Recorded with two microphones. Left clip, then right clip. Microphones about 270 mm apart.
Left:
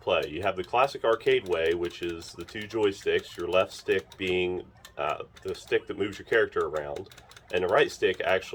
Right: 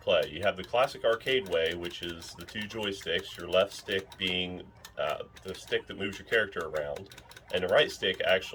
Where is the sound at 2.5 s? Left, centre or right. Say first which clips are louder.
Left 7 dB; centre.